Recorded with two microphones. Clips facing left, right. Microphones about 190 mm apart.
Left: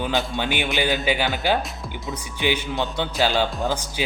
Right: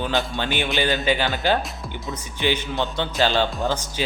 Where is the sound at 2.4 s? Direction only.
15° left (ahead or behind).